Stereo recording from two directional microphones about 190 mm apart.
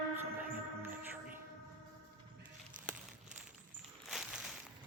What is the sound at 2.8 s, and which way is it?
Crumpling, 45° right (ahead or behind).